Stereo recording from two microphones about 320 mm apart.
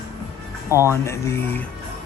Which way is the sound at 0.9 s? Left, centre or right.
Centre.